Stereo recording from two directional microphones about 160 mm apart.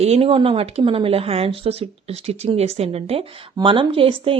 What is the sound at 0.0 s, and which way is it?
Speech, 40° right (ahead or behind).